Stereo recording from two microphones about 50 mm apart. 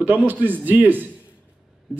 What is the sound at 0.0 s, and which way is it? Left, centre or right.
A man's voice, right.